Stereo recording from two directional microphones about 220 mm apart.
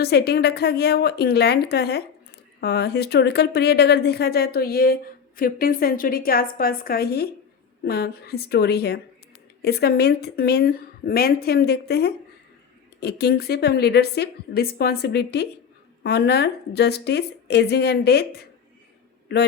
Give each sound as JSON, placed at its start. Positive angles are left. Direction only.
{"t": 0.0, "sound": "a woman's voice", "side_deg": 45}
{"t": 19.3, "sound": "a man's voice", "side_deg": 50}